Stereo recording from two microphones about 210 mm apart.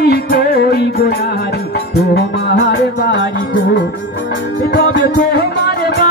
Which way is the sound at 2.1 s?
50° left (ahead or behind).